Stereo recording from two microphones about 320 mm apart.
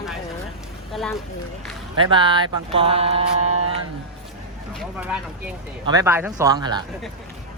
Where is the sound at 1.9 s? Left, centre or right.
Centre.